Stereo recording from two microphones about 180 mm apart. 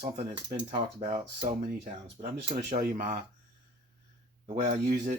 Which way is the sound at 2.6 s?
50° right (ahead or behind).